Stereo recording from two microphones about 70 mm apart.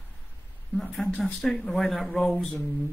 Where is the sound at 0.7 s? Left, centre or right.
Centre.